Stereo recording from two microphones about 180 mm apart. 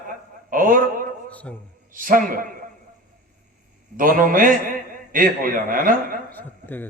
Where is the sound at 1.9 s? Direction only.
50° right (ahead or behind).